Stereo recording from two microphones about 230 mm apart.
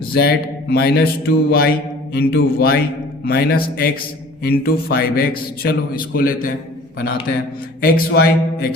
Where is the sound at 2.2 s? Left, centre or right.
Left.